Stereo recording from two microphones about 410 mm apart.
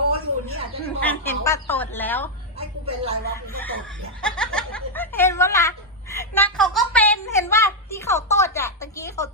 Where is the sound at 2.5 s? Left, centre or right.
Centre.